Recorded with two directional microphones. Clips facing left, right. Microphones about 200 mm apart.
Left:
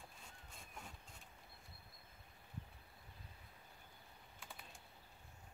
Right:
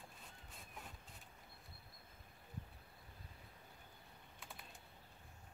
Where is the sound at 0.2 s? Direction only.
Centre (ahead or behind).